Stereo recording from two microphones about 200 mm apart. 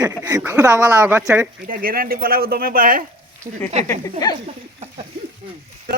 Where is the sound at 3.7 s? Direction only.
35° right (ahead or behind).